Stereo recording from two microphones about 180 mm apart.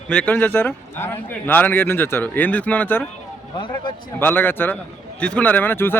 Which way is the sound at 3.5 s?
25° left (ahead or behind).